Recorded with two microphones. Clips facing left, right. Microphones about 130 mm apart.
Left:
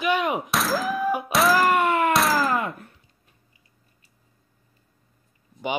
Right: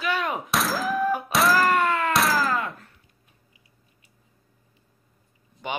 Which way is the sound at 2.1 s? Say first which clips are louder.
Left 2 dB; centre (ahead or behind).